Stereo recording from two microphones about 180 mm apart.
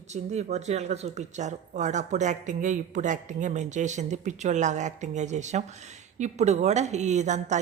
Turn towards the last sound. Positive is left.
turn(degrees=-40)  # may be behind; listen again after turning